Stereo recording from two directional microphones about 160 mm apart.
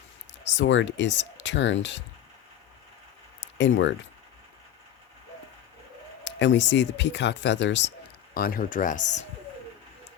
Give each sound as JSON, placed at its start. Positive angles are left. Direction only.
{"t": 0.4, "sound": "speech", "side_deg": 90}
{"t": 6.2, "sound": "speech", "side_deg": 90}
{"t": 8.3, "sound": "speech", "side_deg": 65}